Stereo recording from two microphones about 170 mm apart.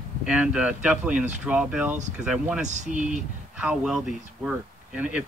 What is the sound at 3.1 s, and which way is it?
Speech, 5° right (ahead or behind).